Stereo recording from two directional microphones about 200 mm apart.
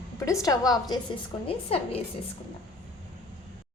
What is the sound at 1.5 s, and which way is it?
Speech, 30° left (ahead or behind).